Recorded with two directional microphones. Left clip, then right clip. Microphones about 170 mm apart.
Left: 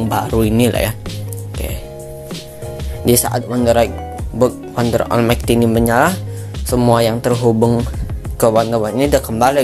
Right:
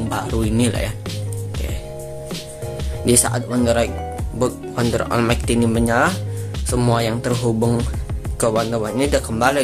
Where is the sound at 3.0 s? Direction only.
20° left (ahead or behind).